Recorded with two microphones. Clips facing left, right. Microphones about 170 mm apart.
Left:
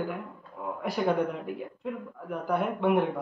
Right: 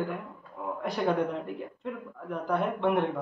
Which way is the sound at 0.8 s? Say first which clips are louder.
Left 1 dB; 5° left (ahead or behind).